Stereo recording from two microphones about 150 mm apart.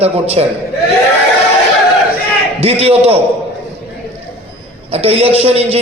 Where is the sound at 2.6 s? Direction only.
40° right (ahead or behind).